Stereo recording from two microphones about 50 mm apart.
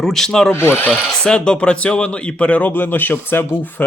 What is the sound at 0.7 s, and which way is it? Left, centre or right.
Speech, left.